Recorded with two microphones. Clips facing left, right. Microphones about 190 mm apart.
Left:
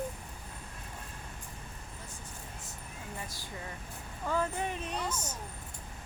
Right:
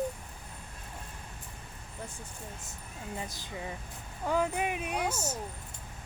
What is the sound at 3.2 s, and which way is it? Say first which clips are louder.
Speech: right 4 dB; 20° right (ahead or behind).